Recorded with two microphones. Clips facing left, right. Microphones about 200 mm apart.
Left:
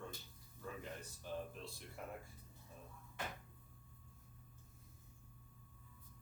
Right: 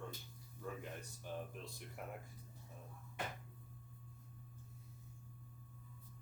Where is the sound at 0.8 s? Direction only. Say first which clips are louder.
Even; 15° right (ahead or behind).